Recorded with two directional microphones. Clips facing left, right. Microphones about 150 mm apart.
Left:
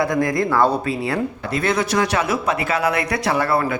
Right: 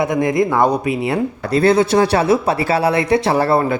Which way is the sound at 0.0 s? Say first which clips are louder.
Right 3 dB; 20° right (ahead or behind).